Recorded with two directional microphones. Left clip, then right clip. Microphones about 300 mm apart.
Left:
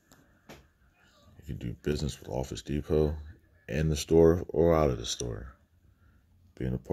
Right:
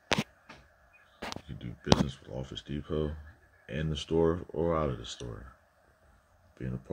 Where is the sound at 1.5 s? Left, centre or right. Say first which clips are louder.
Left 4 dB; left.